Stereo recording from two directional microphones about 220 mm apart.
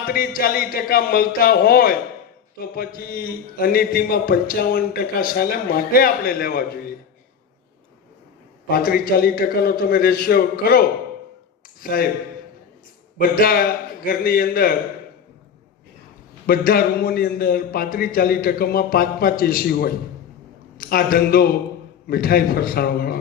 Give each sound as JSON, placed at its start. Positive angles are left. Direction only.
{"t": 0.1, "sound": "a man's voice", "side_deg": 40}
{"t": 8.7, "sound": "a man's voice", "side_deg": 40}
{"t": 13.1, "sound": "a man's voice", "side_deg": 40}
{"t": 16.5, "sound": "a man's voice", "side_deg": 40}